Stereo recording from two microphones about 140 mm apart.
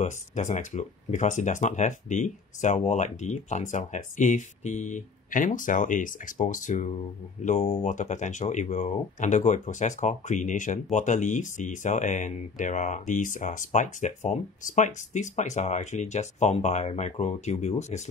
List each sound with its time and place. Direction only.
0.0 s speech: 60° left (ahead or behind)